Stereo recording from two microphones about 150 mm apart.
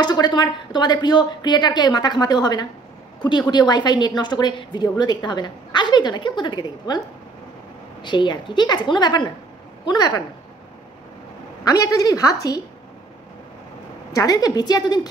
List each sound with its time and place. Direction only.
0.0 s a woman's voice: 30° left (ahead or behind)
8.0 s a woman's voice: 30° left (ahead or behind)
11.6 s a woman's voice: 25° left (ahead or behind)
14.1 s a woman's voice: 25° left (ahead or behind)